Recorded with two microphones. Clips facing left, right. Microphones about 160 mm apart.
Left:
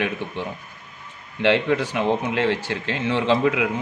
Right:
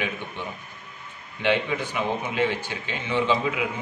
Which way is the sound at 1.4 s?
75° left (ahead or behind).